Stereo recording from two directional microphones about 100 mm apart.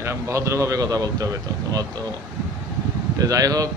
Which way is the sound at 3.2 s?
35° right (ahead or behind).